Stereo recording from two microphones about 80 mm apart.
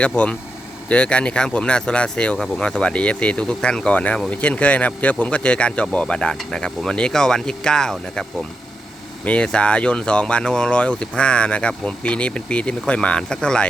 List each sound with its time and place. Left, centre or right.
0.0 s speech: centre
9.2 s speech: centre